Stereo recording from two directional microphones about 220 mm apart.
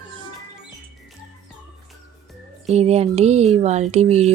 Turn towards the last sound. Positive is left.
turn(degrees=-30)  # may be behind; listen again after turning